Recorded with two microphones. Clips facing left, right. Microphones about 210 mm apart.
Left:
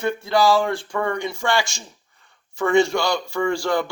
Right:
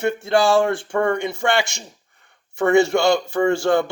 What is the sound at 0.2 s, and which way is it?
Speech, 25° right (ahead or behind).